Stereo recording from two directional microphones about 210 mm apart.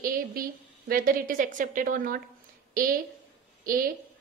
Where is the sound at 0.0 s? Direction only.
45° right (ahead or behind).